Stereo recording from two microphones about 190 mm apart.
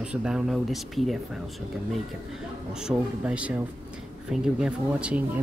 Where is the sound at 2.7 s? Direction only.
5° right (ahead or behind).